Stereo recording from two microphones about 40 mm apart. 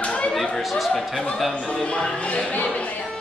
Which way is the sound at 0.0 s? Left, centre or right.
Left.